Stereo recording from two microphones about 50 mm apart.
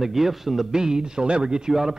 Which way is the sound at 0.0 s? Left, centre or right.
Centre.